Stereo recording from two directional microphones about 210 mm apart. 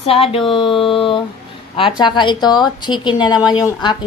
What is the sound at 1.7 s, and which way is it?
Speech, 25° left (ahead or behind).